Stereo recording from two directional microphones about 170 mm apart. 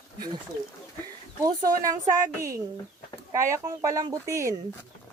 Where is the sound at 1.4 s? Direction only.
20° right (ahead or behind).